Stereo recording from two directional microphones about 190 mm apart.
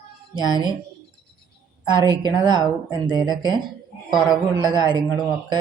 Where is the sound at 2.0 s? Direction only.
25° right (ahead or behind).